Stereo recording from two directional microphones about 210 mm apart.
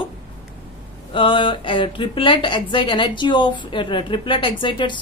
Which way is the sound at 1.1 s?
25° left (ahead or behind).